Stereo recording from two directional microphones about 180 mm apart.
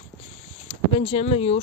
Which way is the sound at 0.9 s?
35° left (ahead or behind).